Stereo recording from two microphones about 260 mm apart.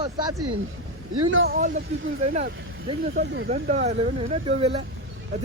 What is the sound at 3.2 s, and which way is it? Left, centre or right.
Speech, right.